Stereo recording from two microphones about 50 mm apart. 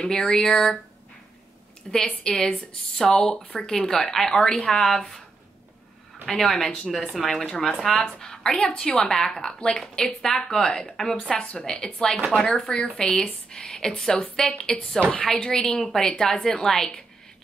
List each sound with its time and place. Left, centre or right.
0.0 s speech: centre
1.9 s speech: centre
6.2 s speech: centre